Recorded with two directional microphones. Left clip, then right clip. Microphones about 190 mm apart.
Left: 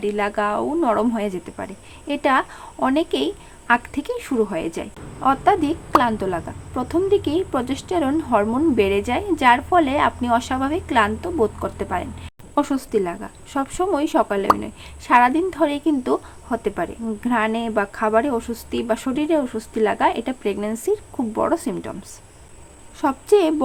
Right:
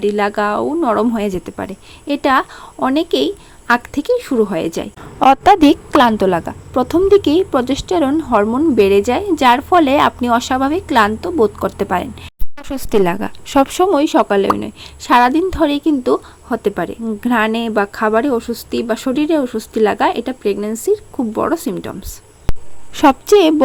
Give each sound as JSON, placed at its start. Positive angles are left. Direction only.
{"t": 0.0, "sound": "speech", "side_deg": -30}
{"t": 5.2, "sound": "a woman's voice", "side_deg": -55}
{"t": 23.0, "sound": "a woman's voice", "side_deg": -40}